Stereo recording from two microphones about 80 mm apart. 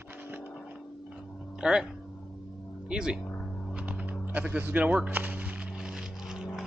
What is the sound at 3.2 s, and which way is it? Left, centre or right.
Vehicle, left.